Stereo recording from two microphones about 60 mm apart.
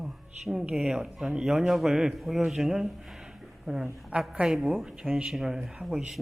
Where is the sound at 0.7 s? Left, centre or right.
Right.